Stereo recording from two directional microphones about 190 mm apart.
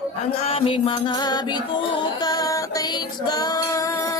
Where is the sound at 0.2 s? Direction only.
35° left (ahead or behind).